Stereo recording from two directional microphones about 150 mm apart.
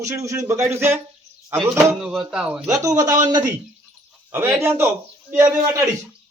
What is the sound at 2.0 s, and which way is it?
Speech, 5° right (ahead or behind).